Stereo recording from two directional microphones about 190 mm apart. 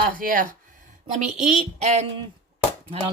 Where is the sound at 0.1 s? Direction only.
45° right (ahead or behind).